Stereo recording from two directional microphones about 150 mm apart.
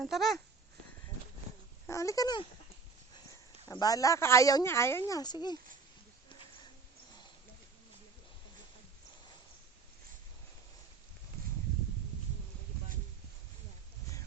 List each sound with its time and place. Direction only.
0.0 s speech: centre (ahead or behind)
1.9 s speech: 20° left (ahead or behind)
3.7 s speech: 25° left (ahead or behind)